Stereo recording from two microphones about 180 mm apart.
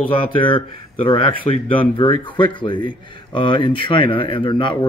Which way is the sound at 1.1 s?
30° left (ahead or behind).